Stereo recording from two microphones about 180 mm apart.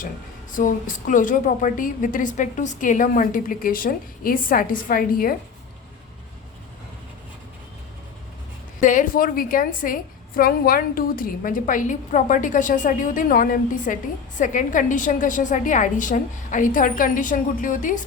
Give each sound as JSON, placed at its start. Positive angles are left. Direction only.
{"t": 0.5, "sound": "a woman's voice", "side_deg": 45}
{"t": 8.8, "sound": "a woman's voice", "side_deg": 45}